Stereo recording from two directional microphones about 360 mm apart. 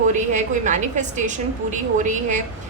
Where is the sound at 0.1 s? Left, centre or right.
Centre.